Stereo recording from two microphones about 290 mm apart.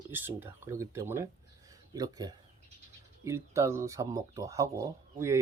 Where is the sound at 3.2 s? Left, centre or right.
Centre.